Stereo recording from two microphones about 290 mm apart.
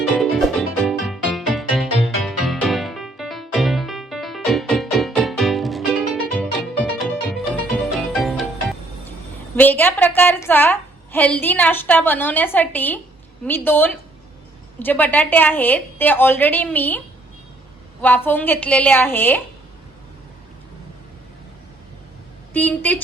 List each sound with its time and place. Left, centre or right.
0.2 s music: centre
9.6 s a sound: centre
10.2 s a woman's voice: centre
18.0 s a woman's voice: centre
22.5 s a woman's voice: centre